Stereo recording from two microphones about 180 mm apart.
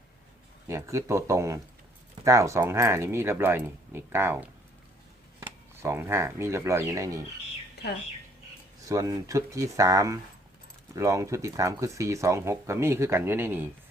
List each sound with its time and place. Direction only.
0.7 s speech: 15° right (ahead or behind)
8.9 s speech: 20° right (ahead or behind)